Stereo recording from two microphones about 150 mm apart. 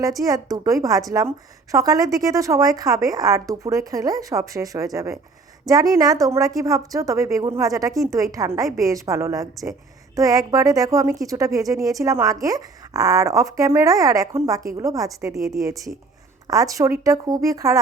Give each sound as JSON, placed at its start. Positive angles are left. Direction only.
{"t": 0.0, "sound": "a woman's voice", "side_deg": -25}